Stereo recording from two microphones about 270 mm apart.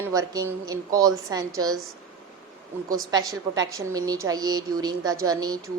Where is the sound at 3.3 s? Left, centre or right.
Centre.